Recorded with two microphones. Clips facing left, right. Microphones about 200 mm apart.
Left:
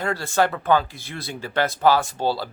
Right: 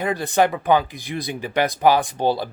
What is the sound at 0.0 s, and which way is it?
A man's voice, 15° right (ahead or behind).